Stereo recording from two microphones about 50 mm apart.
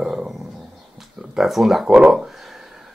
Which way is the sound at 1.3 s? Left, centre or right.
Centre.